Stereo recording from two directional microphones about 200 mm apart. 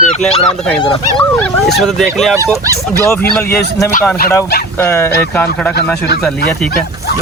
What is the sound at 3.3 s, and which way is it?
Speech, 15° left (ahead or behind).